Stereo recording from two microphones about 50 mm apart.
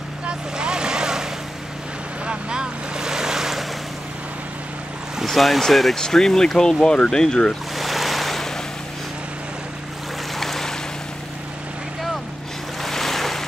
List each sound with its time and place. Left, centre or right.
0.3 s vehicle: centre
2.2 s boat: centre
5.2 s speech: centre
7.7 s waves: centre
10.3 s boat: centre
12.8 s boat: centre